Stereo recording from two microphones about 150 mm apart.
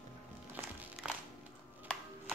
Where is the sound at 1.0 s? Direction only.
5° right (ahead or behind).